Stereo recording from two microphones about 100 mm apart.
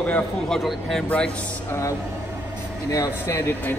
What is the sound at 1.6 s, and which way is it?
Speech, 30° left (ahead or behind).